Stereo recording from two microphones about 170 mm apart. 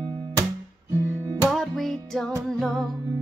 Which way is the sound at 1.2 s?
15° right (ahead or behind).